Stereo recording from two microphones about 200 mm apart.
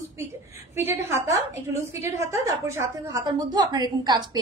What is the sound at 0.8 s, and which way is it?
A woman's voice, 10° right (ahead or behind).